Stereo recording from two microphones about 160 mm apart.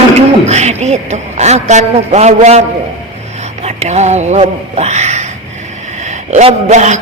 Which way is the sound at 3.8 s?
45° right (ahead or behind).